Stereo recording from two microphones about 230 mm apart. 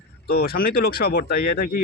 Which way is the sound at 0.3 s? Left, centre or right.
Left.